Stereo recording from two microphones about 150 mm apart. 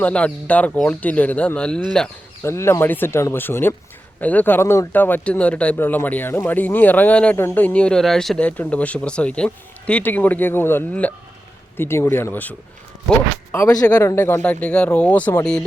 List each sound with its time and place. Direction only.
0.0 s speech: 10° left (ahead or behind)
2.4 s speech: 15° left (ahead or behind)